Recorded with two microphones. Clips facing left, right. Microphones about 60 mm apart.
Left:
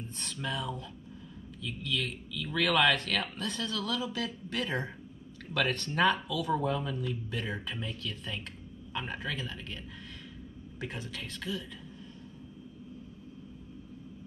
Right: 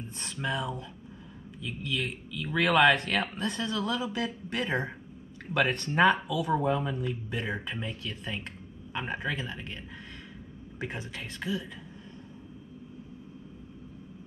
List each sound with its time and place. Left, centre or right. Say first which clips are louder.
0.2 s speech: right 4 dB; centre